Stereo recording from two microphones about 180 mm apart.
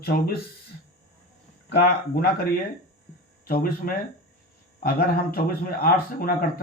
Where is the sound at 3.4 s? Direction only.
55° left (ahead or behind).